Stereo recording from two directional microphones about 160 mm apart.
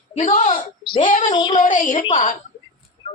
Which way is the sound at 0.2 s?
50° left (ahead or behind).